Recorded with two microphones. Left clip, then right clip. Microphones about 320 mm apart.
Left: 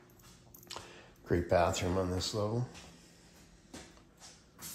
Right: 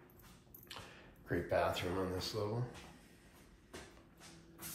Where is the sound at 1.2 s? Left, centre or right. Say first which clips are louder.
Left 6 dB; centre.